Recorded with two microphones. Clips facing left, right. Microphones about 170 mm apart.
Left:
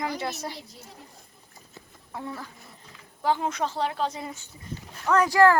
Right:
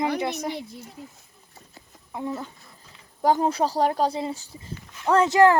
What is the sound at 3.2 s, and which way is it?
Speech, 40° right (ahead or behind).